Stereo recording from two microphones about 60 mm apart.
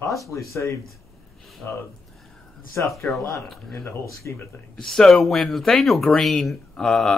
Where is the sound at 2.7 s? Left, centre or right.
Left.